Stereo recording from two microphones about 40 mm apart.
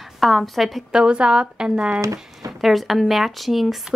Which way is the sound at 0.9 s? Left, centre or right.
Right.